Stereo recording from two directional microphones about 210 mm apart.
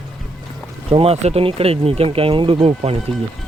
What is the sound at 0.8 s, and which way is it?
Speech, 25° right (ahead or behind).